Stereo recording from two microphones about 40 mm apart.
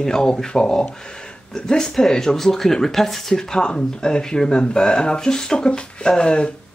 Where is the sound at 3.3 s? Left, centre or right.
Left.